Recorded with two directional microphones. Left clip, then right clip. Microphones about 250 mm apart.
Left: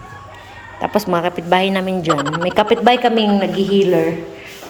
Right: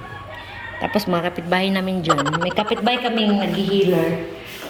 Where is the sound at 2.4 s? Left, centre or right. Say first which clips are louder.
Left 12 dB; centre.